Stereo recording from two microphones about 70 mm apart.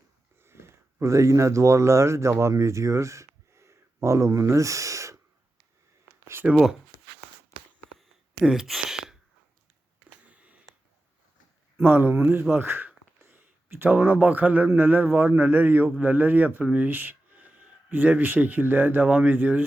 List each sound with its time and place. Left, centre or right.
0.4 s speech: right
6.3 s speech: right
8.4 s a sound: centre
10.2 s sniff: right
11.8 s speech: right